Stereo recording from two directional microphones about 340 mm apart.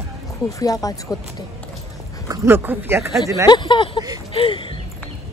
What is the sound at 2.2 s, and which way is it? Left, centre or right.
Speech, centre.